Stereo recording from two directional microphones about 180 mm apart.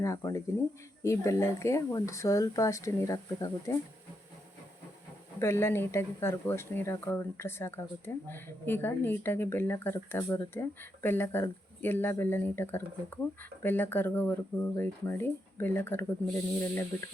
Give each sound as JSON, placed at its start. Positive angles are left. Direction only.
{"t": 0.0, "sound": "speech", "side_deg": 15}
{"t": 5.4, "sound": "speech", "side_deg": 15}